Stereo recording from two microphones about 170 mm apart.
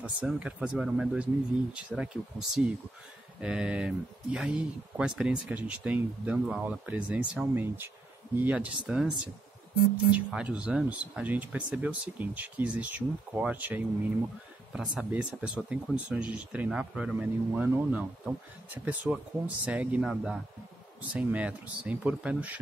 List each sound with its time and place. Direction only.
0.0 s speech: 10° right (ahead or behind)
3.3 s speech: 5° right (ahead or behind)